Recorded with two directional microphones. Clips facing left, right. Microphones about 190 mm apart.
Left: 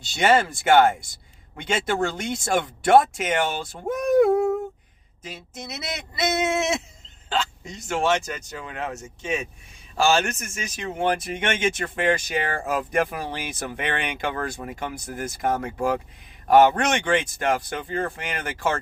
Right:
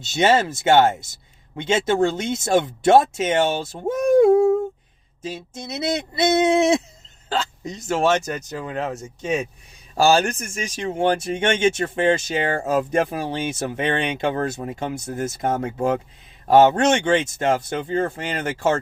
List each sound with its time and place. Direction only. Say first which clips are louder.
0.0 s speech: right 2 dB; 20° right (ahead or behind)